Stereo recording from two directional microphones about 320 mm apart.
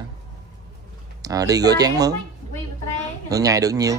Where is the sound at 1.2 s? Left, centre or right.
Centre.